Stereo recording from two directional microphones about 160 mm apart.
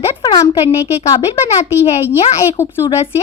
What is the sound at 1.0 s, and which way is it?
Speech, 40° left (ahead or behind).